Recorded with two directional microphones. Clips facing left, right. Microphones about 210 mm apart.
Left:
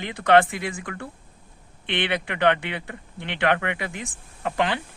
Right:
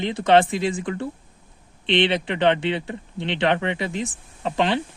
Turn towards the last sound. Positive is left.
turn(degrees=-25)  # may be behind; listen again after turning